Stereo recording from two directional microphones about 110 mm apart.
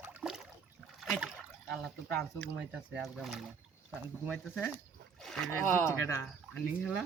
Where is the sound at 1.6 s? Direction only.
Centre (ahead or behind).